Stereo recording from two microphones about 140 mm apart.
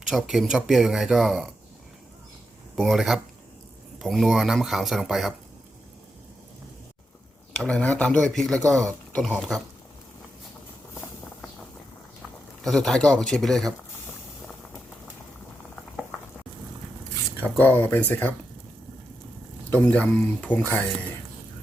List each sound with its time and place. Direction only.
0.1 s speech: centre (ahead or behind)
2.7 s speech: centre (ahead or behind)
7.6 s speech: 10° left (ahead or behind)
12.6 s speech: 5° left (ahead or behind)
17.4 s speech: 10° left (ahead or behind)
19.7 s speech: 10° left (ahead or behind)